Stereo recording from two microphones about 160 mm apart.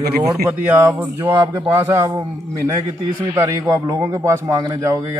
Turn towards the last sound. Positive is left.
turn(degrees=-20)  # may be behind; listen again after turning